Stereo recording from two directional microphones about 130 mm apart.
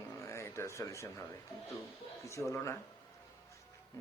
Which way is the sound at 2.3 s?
20° left (ahead or behind).